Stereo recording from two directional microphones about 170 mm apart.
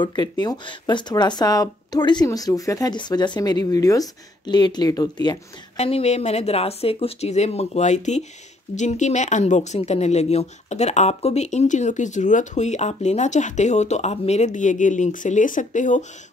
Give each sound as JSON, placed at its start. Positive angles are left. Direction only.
{"t": 0.0, "sound": "speech", "side_deg": 25}
{"t": 5.8, "sound": "speech", "side_deg": 35}